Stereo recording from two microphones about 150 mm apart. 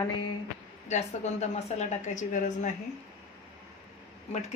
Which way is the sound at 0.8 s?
50° left (ahead or behind).